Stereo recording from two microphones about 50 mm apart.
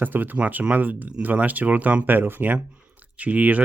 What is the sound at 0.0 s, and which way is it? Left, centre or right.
Speech, right.